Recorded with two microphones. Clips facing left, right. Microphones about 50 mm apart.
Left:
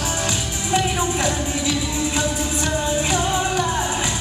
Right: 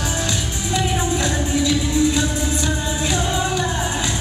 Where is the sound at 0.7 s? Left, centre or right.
Left.